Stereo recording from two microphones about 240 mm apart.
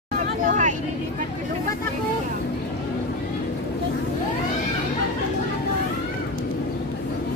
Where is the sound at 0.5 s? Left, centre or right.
Right.